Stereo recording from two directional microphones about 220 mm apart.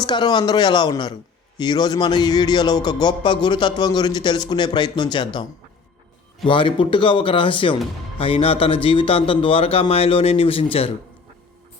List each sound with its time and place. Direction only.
0.0 s speech: 20° left (ahead or behind)